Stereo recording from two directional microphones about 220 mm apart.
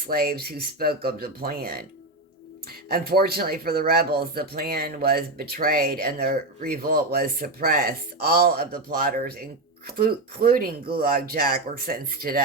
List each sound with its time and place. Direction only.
0.0 s speech: 45° right (ahead or behind)
2.9 s speech: 45° right (ahead or behind)